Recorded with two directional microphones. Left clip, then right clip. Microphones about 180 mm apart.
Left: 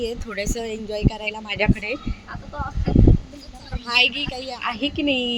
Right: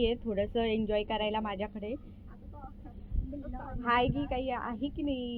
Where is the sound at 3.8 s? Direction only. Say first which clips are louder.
Left 10 dB; 10° left (ahead or behind).